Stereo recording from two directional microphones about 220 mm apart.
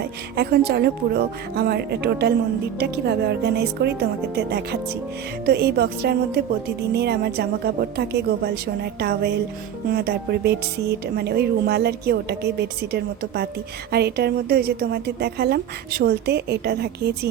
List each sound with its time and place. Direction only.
0.3 s speech: 45° right (ahead or behind)